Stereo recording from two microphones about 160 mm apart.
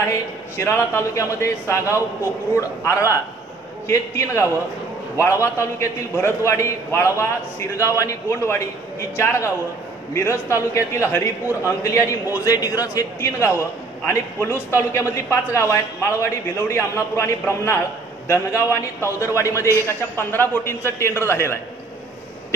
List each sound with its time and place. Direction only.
0.6 s a man's voice: 15° left (ahead or behind)
10.5 s a man's voice: 15° left (ahead or behind)